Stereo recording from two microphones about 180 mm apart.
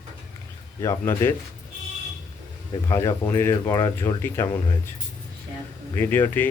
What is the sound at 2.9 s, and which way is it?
Speech, 15° left (ahead or behind).